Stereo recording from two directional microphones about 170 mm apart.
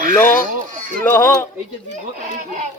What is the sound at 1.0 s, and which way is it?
Speech, 10° left (ahead or behind).